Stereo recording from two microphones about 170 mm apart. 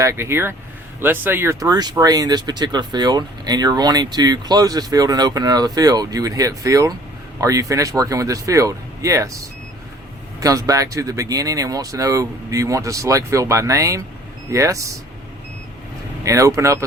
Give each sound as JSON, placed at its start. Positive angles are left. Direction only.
{"t": 0.0, "sound": "speech", "side_deg": -15}
{"t": 16.2, "sound": "speech", "side_deg": -20}